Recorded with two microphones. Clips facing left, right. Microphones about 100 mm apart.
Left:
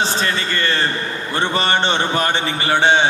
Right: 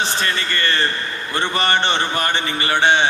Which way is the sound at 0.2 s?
55° right (ahead or behind).